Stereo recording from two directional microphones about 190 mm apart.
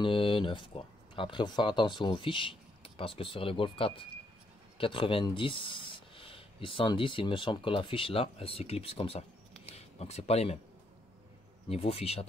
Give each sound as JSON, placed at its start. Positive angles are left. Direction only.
{"t": 0.0, "sound": "speech", "side_deg": 25}
{"t": 11.7, "sound": "speech", "side_deg": 30}